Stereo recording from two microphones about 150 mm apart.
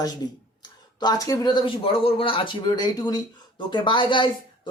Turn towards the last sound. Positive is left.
turn(degrees=35)  # may be behind; listen again after turning